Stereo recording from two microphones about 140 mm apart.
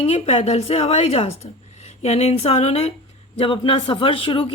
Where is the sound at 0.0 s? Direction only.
45° left (ahead or behind).